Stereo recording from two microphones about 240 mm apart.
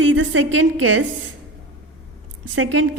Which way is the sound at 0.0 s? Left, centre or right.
Right.